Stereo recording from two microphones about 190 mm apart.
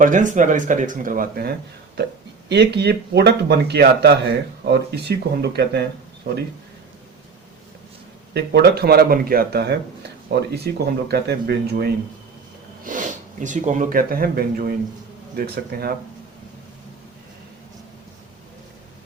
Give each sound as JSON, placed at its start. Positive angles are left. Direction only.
{"t": 0.0, "sound": "speech", "side_deg": -45}
{"t": 8.3, "sound": "speech", "side_deg": -60}
{"t": 12.8, "sound": "speech", "side_deg": -45}